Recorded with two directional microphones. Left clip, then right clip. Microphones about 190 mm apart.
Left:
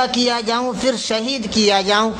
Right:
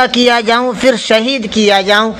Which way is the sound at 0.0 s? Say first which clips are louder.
Right 8 dB; 20° right (ahead or behind).